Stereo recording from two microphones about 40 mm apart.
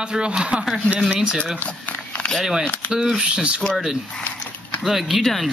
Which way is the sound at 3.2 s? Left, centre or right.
Right.